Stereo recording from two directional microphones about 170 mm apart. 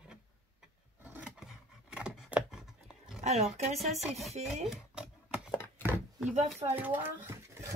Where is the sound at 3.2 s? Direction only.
40° right (ahead or behind).